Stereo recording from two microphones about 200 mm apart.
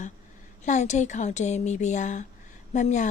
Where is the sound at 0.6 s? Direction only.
35° left (ahead or behind).